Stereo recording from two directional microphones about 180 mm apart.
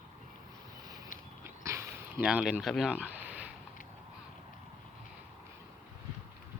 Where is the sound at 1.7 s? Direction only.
15° right (ahead or behind).